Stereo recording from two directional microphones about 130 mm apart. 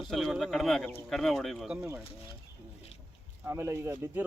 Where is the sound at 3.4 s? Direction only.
20° right (ahead or behind).